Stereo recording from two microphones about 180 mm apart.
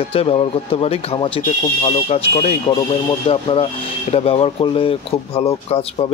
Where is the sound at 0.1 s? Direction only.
30° left (ahead or behind).